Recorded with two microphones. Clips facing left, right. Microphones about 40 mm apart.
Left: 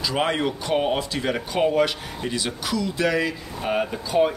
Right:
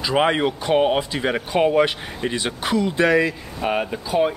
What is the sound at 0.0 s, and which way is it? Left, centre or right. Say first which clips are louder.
Speech: right 4 dB; right.